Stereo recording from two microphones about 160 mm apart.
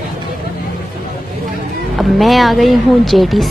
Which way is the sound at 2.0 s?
Centre (ahead or behind).